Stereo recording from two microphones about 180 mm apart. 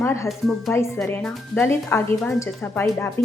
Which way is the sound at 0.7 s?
15° left (ahead or behind).